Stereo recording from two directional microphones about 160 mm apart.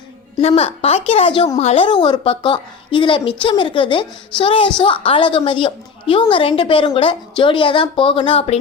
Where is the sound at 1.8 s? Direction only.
30° left (ahead or behind).